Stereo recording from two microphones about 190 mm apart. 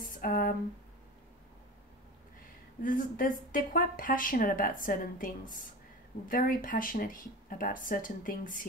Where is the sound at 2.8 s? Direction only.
45° left (ahead or behind).